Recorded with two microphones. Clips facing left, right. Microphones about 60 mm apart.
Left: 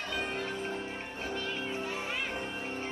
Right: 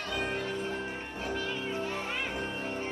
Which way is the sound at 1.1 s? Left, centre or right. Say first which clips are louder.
Right 2 dB; centre.